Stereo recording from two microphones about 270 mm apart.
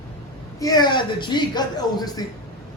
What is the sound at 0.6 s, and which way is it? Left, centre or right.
A man's voice, centre.